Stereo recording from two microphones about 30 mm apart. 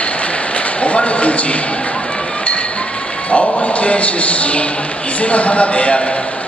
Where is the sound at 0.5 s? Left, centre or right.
Left.